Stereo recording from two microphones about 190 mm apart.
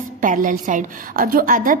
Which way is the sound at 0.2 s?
45° right (ahead or behind).